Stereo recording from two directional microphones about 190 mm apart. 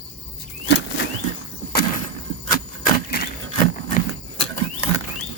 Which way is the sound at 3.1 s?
50° left (ahead or behind).